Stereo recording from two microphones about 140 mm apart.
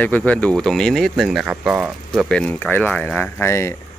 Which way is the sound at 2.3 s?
10° left (ahead or behind).